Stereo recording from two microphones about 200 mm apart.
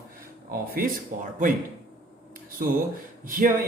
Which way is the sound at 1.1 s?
40° right (ahead or behind).